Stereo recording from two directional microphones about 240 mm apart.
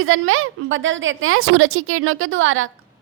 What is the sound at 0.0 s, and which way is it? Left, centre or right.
A woman's voice, right.